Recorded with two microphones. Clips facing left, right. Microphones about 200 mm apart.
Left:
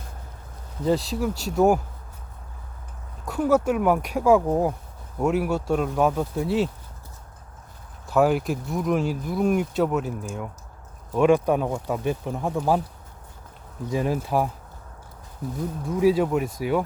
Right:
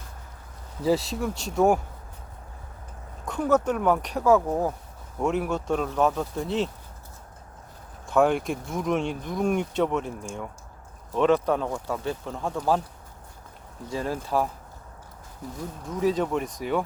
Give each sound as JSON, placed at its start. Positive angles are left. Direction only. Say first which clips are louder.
{"t": 0.8, "sound": "speech", "louder": "left 1 dB", "side_deg": -5}
{"t": 3.2, "sound": "speech", "louder": "left 2 dB", "side_deg": 5}
{"t": 8.0, "sound": "speech", "louder": "left 1 dB", "side_deg": 5}
{"t": 13.9, "sound": "speech", "louder": "left 3 dB", "side_deg": 15}
{"t": 15.9, "sound": "speech", "louder": "left 4 dB", "side_deg": 10}